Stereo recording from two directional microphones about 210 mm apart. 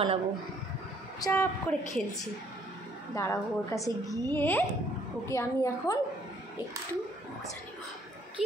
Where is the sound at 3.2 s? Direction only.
15° left (ahead or behind).